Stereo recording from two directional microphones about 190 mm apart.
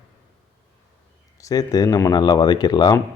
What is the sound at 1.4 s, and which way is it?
Speech, 20° left (ahead or behind).